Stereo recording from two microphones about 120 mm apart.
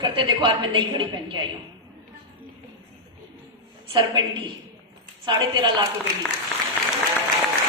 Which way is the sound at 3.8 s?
40° right (ahead or behind).